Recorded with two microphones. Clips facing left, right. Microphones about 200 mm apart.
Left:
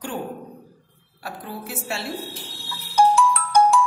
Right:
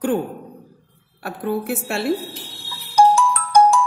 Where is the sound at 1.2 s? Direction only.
55° right (ahead or behind).